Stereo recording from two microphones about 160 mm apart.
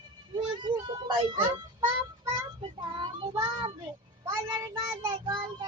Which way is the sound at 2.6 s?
30° right (ahead or behind).